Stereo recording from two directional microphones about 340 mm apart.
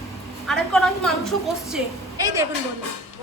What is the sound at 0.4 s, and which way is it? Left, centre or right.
A woman's voice, centre.